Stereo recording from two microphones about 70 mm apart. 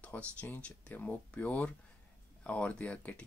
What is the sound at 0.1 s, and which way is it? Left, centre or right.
Speech, left.